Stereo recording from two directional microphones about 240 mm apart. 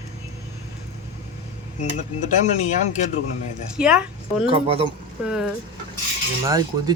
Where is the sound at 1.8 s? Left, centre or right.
Left.